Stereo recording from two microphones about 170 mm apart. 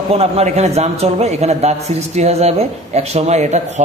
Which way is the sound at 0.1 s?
40° right (ahead or behind).